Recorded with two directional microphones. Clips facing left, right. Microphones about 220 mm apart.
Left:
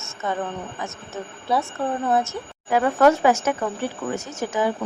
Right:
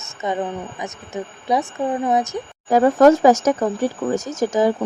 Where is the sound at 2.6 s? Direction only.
40° right (ahead or behind).